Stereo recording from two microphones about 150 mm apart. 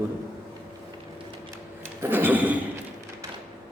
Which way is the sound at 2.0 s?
15° right (ahead or behind).